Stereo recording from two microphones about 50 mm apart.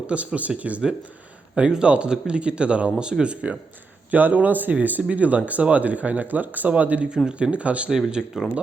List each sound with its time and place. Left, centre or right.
0.1 s speech: right
4.1 s speech: right
7.3 s speech: right
7.9 s speech: centre